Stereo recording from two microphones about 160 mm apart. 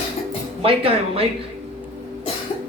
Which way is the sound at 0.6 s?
35° right (ahead or behind).